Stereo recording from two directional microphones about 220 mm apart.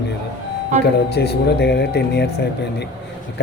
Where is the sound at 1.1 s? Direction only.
50° left (ahead or behind).